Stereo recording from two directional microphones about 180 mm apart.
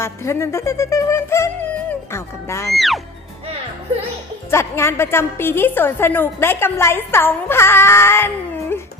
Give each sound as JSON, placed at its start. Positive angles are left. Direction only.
{"t": 0.0, "sound": "a woman's voice", "side_deg": 15}
{"t": 2.7, "sound": "speech", "side_deg": 0}
{"t": 4.5, "sound": "a woman's voice", "side_deg": 15}